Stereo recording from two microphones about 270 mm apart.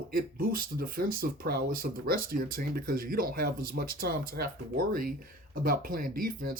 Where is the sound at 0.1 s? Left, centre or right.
Right.